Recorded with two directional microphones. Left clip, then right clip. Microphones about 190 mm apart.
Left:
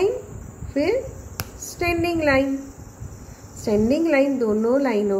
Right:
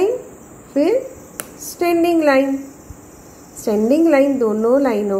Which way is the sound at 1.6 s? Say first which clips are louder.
Right 6 dB; 5° right (ahead or behind).